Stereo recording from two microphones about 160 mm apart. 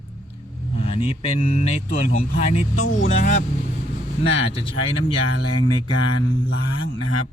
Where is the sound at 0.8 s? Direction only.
35° left (ahead or behind).